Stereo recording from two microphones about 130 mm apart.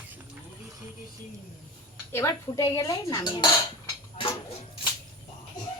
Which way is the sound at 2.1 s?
25° left (ahead or behind).